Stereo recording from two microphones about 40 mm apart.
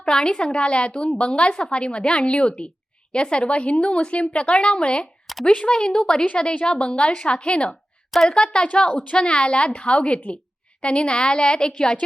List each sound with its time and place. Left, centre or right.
0.0 s speech: centre
6.2 s a woman's voice: left
8.9 s a woman's voice: left
9.1 s speech: left